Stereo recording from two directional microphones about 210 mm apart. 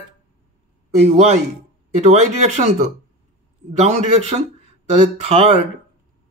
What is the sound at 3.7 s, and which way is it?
Speech, 30° right (ahead or behind).